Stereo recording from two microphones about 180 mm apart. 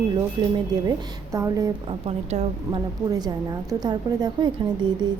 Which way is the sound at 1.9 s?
35° right (ahead or behind).